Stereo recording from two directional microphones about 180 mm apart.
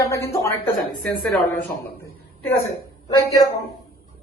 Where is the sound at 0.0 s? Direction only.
15° left (ahead or behind).